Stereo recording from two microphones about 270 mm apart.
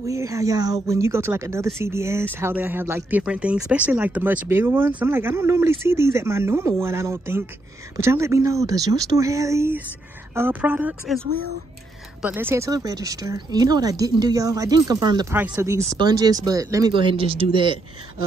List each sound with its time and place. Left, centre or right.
0.0 s a woman's voice: centre